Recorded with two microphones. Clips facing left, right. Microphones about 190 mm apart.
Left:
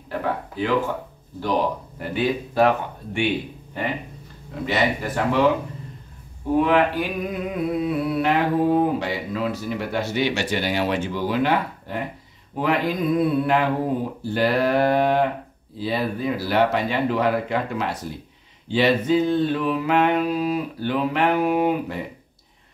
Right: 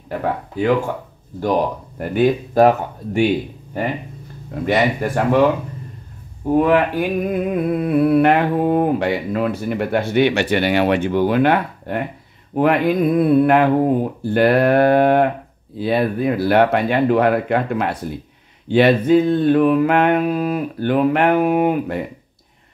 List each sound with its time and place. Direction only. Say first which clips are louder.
2.0 s speech: right 8 dB; 50° right (ahead or behind)
4.6 s speech: right 5 dB; 50° right (ahead or behind)
6.5 s mantra: right 3 dB; 50° right (ahead or behind)